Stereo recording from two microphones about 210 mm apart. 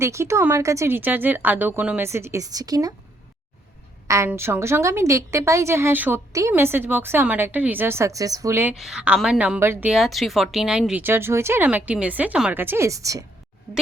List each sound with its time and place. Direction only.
0.0 s a woman's voice: 15° right (ahead or behind)
4.1 s a woman's voice: 10° right (ahead or behind)